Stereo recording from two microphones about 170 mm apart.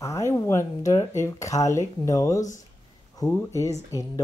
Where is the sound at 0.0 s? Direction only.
20° left (ahead or behind).